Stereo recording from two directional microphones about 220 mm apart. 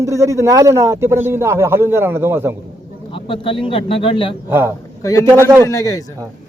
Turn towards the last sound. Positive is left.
turn(degrees=15)  # may be behind; listen again after turning